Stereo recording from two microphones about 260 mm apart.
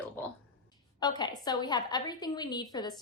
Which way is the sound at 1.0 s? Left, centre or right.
Centre.